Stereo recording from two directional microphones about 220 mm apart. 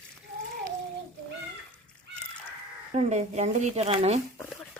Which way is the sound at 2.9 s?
30° right (ahead or behind).